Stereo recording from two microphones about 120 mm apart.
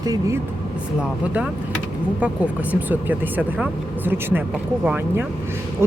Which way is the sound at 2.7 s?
15° right (ahead or behind).